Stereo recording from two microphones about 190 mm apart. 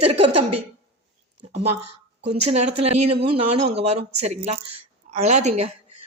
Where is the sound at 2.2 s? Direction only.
35° right (ahead or behind).